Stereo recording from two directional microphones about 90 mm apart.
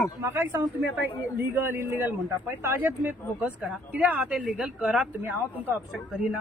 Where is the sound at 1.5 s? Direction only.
25° right (ahead or behind).